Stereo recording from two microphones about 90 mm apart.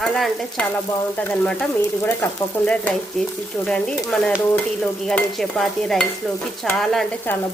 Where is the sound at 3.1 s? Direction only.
Centre (ahead or behind).